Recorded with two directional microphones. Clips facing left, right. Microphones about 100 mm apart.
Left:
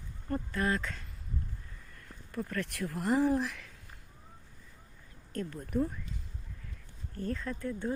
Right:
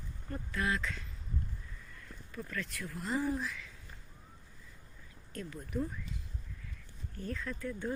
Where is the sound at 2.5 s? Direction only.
65° left (ahead or behind).